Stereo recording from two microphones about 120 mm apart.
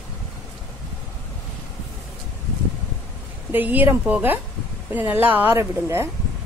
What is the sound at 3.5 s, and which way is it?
A woman's voice, 15° right (ahead or behind).